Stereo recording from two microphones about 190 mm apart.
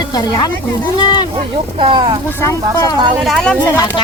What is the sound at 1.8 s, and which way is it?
Speech, 25° right (ahead or behind).